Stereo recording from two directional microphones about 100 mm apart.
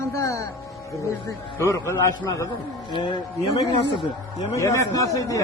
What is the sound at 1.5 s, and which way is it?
Speech, 25° left (ahead or behind).